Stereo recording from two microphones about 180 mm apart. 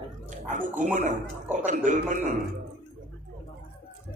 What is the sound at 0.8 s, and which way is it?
A man's voice, 45° right (ahead or behind).